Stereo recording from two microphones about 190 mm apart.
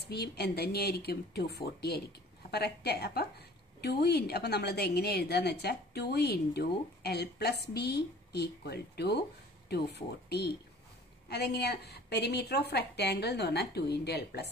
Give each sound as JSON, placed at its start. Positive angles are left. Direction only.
{"t": 0.1, "sound": "a woman's voice", "side_deg": 55}